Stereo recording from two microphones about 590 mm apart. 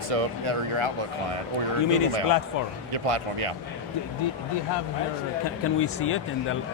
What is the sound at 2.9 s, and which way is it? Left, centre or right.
Speech, right.